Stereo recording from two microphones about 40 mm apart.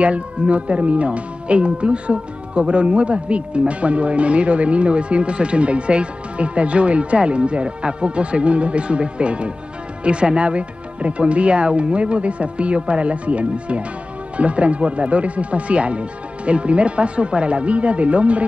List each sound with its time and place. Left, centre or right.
0.0 s speech: right